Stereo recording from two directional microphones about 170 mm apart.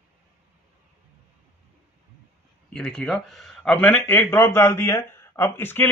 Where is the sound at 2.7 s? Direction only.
5° left (ahead or behind).